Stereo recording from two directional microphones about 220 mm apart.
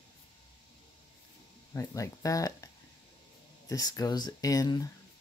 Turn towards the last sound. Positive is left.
turn(degrees=15)  # may be behind; listen again after turning